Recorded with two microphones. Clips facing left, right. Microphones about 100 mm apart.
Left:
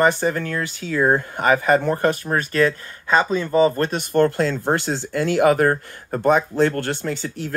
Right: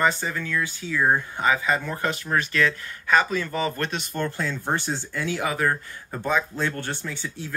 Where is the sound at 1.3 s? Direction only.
55° left (ahead or behind).